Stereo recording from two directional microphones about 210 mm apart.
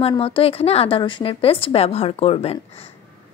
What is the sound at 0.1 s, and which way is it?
Speech, 25° left (ahead or behind).